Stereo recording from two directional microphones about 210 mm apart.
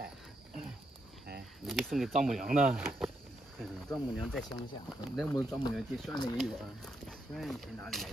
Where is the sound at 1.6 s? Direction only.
Centre (ahead or behind).